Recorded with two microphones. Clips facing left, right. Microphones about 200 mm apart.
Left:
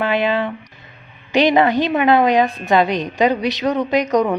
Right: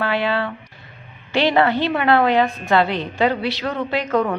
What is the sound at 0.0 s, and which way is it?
A woman's voice, 20° left (ahead or behind).